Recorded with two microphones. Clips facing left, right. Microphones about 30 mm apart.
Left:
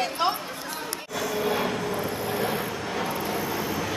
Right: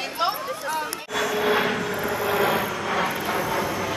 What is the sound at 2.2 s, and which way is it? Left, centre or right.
Vehicle, right.